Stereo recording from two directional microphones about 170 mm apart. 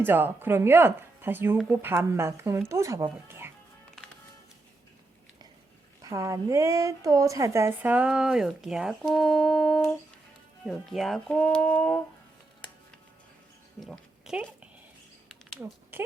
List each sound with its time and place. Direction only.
0.0 s a woman's voice: 10° right (ahead or behind)
6.0 s a woman's voice: 20° right (ahead or behind); by 12.0 s 10° left (ahead or behind)
13.7 s a sound: centre (ahead or behind)
15.6 s speech: 10° right (ahead or behind)